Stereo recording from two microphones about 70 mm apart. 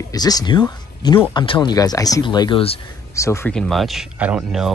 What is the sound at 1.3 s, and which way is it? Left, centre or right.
Speech, left.